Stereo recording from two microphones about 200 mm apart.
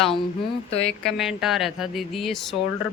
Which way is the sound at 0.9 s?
Centre (ahead or behind).